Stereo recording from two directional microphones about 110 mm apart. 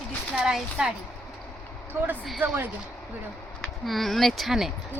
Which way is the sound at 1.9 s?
20° right (ahead or behind).